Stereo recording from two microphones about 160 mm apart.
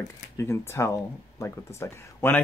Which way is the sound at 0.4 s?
15° left (ahead or behind).